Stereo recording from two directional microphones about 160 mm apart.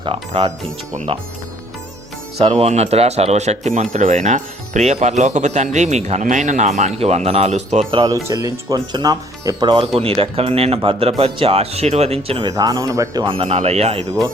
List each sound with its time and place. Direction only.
0.0 s speech: 35° right (ahead or behind)
2.5 s speech: 40° right (ahead or behind)
7.9 s speech: 30° right (ahead or behind)
10.0 s speech: 35° right (ahead or behind)
12.5 s speech: 25° right (ahead or behind); by 14.1 s 40° right (ahead or behind)